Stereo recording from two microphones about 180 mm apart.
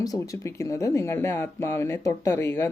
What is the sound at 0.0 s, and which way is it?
Speech, 15° left (ahead or behind).